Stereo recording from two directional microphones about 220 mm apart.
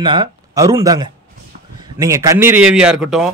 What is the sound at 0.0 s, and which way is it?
Speech, 20° right (ahead or behind).